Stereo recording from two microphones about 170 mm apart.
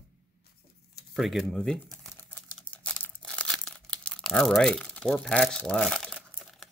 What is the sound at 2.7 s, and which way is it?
Crumpling, 10° left (ahead or behind).